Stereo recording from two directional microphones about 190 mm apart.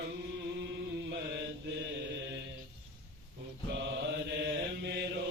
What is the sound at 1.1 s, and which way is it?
Mantra, 65° right (ahead or behind).